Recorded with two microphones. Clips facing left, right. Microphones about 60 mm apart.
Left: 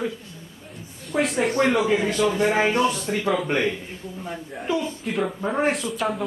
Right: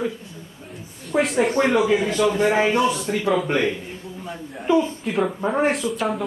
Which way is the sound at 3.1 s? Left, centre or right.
Centre.